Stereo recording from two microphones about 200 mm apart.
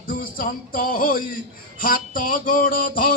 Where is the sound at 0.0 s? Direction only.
45° left (ahead or behind).